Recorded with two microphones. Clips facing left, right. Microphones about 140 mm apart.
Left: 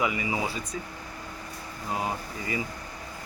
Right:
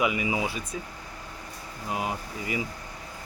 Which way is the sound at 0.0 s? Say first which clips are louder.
Right 2 dB; 15° right (ahead or behind).